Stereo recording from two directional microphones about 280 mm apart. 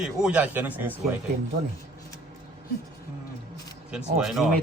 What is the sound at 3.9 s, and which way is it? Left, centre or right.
Speech, centre.